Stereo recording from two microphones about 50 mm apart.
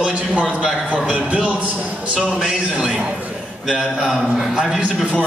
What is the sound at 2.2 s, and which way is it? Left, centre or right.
A man's voice, centre.